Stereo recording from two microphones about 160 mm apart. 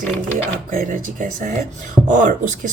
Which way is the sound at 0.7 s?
55° right (ahead or behind).